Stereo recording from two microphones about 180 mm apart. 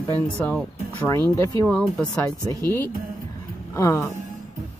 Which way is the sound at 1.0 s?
15° left (ahead or behind).